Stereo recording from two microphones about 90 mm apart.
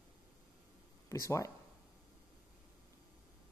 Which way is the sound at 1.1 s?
35° left (ahead or behind).